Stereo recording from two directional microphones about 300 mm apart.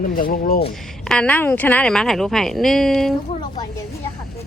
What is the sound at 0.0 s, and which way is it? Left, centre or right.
Speech, left.